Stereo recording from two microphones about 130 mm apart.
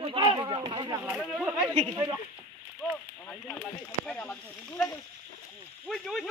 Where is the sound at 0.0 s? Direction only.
45° right (ahead or behind).